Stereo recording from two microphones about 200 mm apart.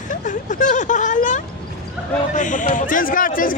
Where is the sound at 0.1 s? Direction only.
40° left (ahead or behind).